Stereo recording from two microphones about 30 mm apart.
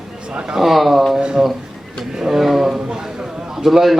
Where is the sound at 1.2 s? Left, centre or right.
Right.